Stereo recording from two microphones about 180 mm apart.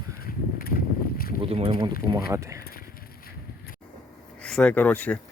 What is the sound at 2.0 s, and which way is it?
Speech, 20° right (ahead or behind).